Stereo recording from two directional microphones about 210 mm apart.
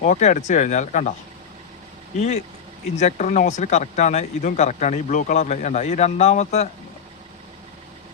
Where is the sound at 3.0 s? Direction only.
35° left (ahead or behind).